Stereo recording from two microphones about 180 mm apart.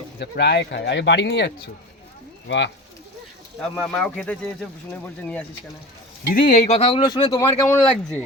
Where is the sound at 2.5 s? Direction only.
90° left.